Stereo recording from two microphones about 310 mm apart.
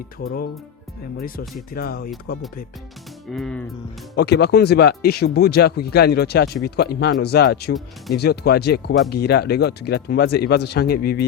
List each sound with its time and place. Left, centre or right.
1.7 s speech: left
3.3 s speech: centre
4.1 s speech: left